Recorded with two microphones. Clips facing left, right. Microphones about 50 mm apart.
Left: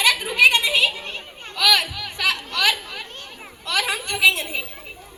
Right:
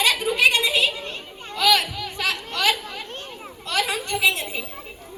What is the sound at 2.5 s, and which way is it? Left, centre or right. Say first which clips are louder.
Chatter: left 1 dB; left.